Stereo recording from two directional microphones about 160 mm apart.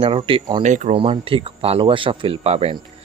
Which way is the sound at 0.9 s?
35° right (ahead or behind).